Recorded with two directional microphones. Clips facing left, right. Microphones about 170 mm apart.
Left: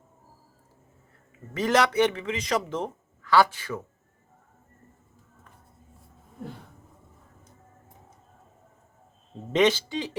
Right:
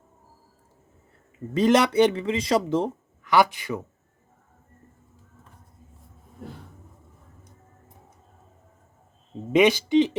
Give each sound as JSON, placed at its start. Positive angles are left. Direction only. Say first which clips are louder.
{"t": 1.5, "sound": "speech", "louder": "right 4 dB", "side_deg": -25}
{"t": 3.2, "sound": "speech", "louder": "right 1 dB", "side_deg": -15}
{"t": 9.5, "sound": "speech", "louder": "right 4 dB", "side_deg": -10}